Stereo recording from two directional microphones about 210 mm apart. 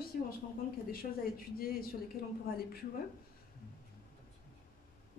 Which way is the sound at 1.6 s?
45° left (ahead or behind).